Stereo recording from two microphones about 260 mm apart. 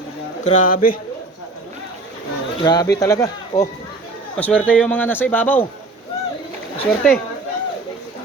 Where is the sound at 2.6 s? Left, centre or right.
Centre.